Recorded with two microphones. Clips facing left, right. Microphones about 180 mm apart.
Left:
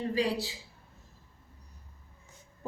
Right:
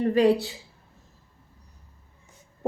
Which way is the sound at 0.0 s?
60° right (ahead or behind).